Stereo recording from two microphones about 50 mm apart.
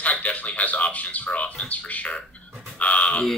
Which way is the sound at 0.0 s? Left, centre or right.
Left.